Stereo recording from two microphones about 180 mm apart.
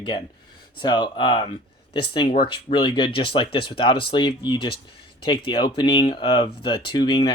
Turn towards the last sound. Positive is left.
turn(degrees=30)  # may be behind; listen again after turning